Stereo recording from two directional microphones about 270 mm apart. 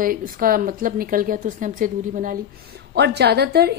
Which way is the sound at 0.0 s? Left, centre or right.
Right.